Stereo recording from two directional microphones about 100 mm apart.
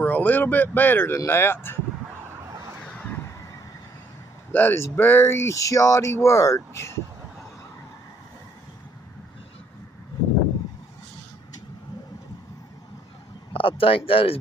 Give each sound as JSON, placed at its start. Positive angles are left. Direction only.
{"t": 0.0, "sound": "speech", "side_deg": 15}
{"t": 3.1, "sound": "a sound", "side_deg": 25}
{"t": 4.5, "sound": "speech", "side_deg": 20}
{"t": 13.5, "sound": "speech", "side_deg": 65}